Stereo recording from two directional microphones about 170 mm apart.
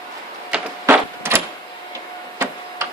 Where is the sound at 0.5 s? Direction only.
15° right (ahead or behind).